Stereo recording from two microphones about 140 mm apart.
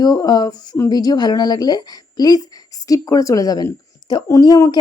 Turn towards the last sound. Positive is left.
turn(degrees=25)  # may be behind; listen again after turning